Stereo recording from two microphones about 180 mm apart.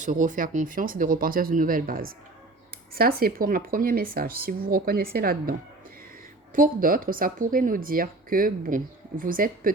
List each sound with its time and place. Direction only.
0.0 s speech: 45° right (ahead or behind)